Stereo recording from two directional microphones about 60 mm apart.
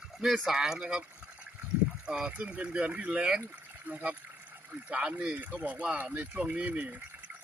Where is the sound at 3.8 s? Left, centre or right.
Right.